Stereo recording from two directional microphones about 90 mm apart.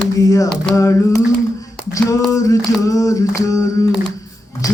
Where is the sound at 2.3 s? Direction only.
40° left (ahead or behind).